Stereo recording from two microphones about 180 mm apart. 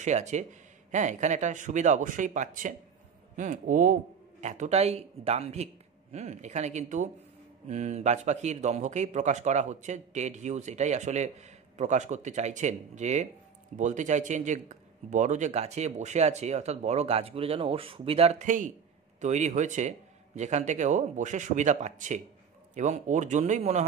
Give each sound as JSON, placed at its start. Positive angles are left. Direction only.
{"t": 0.0, "sound": "a man's voice", "side_deg": -40}